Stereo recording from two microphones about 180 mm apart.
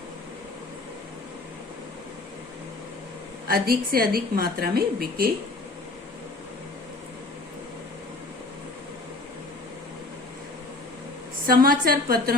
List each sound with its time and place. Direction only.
3.4 s a woman's voice: 55° right (ahead or behind)
11.4 s a woman's voice: 55° right (ahead or behind)